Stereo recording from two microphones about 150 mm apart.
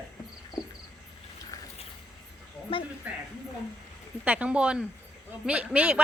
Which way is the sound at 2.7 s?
35° left (ahead or behind).